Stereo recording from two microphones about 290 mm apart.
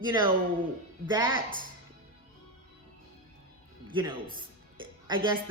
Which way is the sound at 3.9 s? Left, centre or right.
Centre.